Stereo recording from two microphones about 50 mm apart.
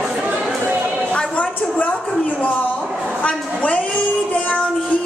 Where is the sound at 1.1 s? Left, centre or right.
Left.